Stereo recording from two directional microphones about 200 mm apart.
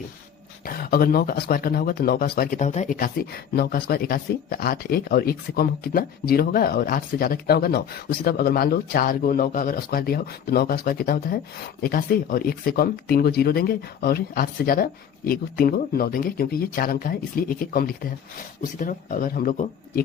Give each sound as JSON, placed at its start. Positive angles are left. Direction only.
{"t": 0.6, "sound": "speech", "side_deg": 45}